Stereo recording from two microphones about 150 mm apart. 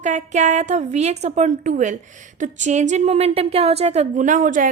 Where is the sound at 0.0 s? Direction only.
50° right (ahead or behind).